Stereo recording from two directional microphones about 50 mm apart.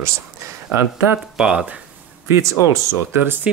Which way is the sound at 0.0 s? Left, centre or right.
Right.